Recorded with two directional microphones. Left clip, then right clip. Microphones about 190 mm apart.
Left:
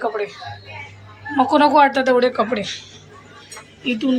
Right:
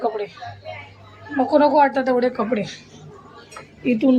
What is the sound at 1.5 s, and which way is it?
A woman's voice, 5° right (ahead or behind).